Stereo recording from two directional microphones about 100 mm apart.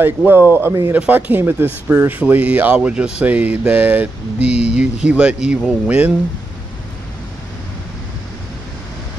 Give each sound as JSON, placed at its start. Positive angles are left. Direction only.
{"t": 0.0, "sound": "speech", "side_deg": -20}
{"t": 4.5, "sound": "a sound", "side_deg": 90}
{"t": 4.7, "sound": "speech", "side_deg": -10}